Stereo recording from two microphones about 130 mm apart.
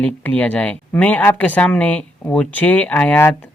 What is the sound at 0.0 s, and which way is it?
Speech, 10° left (ahead or behind).